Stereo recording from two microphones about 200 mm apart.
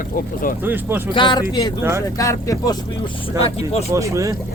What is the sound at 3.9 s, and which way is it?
Speech, 15° right (ahead or behind).